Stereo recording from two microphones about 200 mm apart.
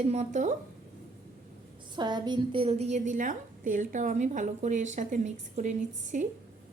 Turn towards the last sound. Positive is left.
turn(degrees=-35)  # may be behind; listen again after turning